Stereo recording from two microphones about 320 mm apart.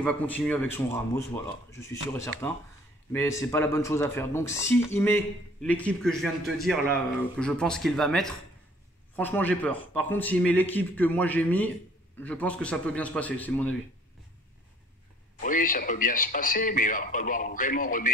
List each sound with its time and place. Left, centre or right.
0.0 s a man's voice: centre
15.4 s speech: left